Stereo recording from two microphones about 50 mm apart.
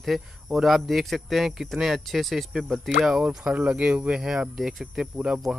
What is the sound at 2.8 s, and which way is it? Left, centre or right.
Speech, centre.